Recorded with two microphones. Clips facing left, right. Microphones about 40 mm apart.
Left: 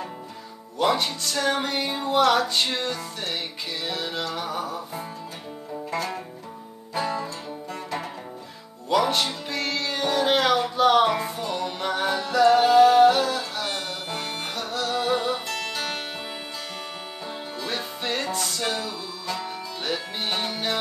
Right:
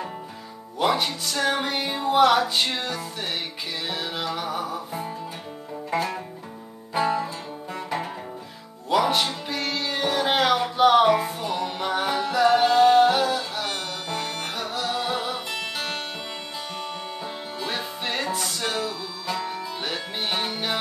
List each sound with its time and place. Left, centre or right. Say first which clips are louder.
0.7 s speech: even; centre
5.9 s music: right 4 dB; centre
17.2 s music: right 1 dB; centre